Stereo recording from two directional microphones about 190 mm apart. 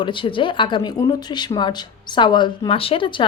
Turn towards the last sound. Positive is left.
turn(degrees=25)  # may be behind; listen again after turning